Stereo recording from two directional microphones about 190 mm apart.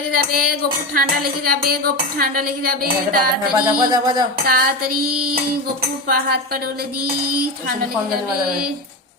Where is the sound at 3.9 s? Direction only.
20° right (ahead or behind).